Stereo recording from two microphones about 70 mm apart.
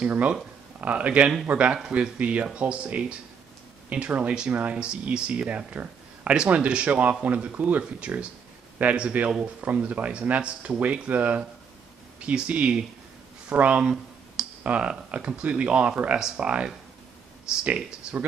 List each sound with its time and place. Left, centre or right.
0.0 s speech: centre